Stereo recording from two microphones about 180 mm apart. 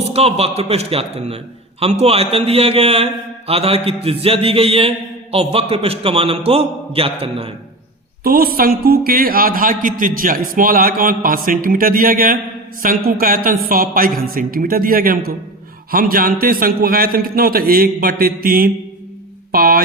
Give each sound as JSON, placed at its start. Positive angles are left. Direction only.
{"t": 0.0, "sound": "a man's voice", "side_deg": -35}
{"t": 8.2, "sound": "a man's voice", "side_deg": -55}